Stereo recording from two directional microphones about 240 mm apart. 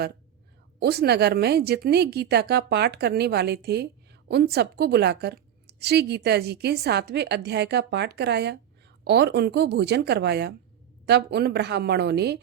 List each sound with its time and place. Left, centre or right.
0.8 s speech: right